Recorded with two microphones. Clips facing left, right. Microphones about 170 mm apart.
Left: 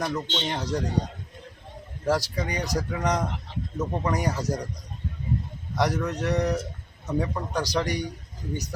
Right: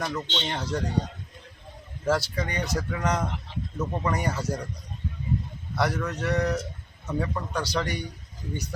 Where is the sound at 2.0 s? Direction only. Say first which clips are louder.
Even; 15° left (ahead or behind).